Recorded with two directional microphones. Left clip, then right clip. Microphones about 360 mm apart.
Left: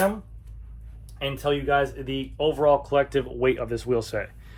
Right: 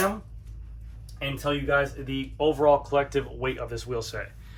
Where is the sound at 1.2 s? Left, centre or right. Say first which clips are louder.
Left 3 dB; centre.